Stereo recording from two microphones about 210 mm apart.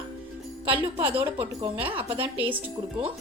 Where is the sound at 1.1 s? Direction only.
25° right (ahead or behind).